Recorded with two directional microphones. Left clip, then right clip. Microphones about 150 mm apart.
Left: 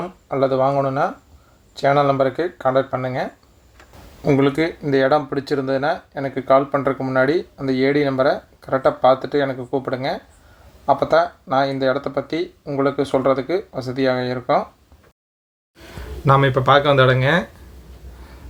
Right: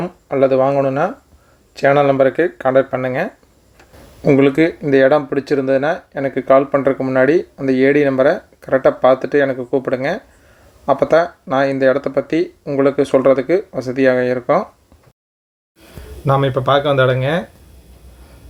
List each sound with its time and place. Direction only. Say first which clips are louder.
0.3 s speech: right 4 dB; 20° right (ahead or behind)
16.2 s speech: even; 10° right (ahead or behind)